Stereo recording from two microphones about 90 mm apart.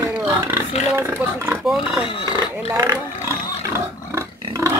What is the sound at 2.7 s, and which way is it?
Speech, 45° right (ahead or behind).